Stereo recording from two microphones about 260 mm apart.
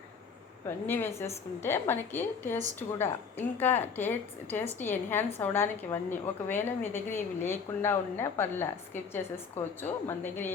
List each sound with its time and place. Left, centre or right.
0.9 s a woman's voice: centre